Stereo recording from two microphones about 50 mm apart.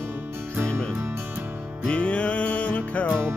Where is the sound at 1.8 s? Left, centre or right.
Left.